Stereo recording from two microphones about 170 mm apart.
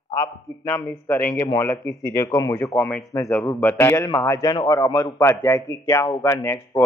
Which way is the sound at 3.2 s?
Centre (ahead or behind).